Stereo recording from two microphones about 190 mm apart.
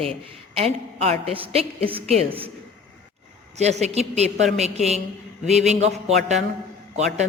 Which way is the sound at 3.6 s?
35° right (ahead or behind).